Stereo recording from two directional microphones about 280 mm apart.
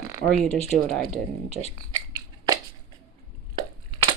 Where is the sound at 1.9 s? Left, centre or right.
Centre.